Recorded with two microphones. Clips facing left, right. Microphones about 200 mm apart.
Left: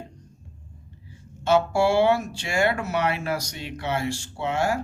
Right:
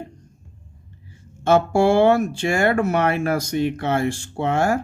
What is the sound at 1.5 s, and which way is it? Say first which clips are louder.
Speech: right 4 dB; 50° right (ahead or behind).